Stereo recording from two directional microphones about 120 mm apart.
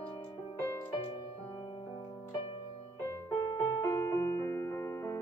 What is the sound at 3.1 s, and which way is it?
Music, 30° left (ahead or behind).